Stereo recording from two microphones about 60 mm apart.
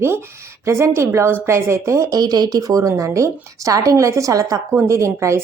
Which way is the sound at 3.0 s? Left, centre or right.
Right.